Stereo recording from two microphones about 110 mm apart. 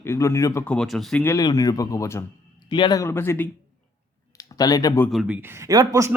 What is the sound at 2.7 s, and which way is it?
Speech, 45° left (ahead or behind).